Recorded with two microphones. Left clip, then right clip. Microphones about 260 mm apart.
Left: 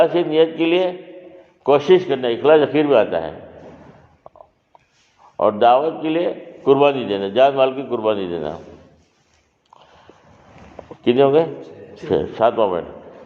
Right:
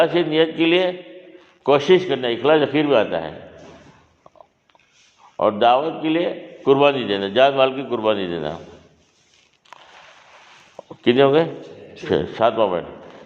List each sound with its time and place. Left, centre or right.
0.0 s a man's voice: right
4.3 s a sound: right
5.4 s a man's voice: right
11.0 s a man's voice: right